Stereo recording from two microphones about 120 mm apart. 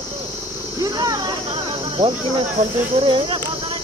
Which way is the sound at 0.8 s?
30° right (ahead or behind).